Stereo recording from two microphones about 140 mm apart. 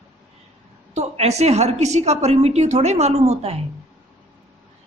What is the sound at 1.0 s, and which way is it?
Speech, 50° right (ahead or behind).